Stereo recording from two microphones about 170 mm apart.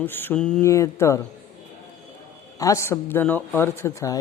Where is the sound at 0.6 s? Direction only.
15° left (ahead or behind).